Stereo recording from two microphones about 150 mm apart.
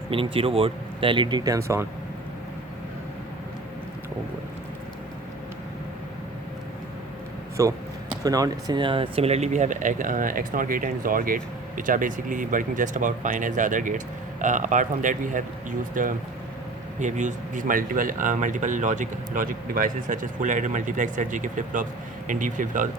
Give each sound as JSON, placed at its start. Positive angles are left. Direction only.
{"t": 0.1, "sound": "speech", "side_deg": -35}
{"t": 7.6, "sound": "speech", "side_deg": -20}